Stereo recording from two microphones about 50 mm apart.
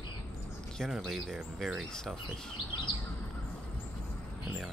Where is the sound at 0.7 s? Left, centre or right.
Centre.